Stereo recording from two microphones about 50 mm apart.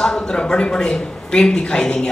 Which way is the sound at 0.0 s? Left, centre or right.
Centre.